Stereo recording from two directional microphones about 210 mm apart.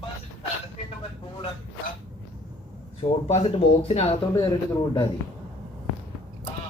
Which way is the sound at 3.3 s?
30° left (ahead or behind).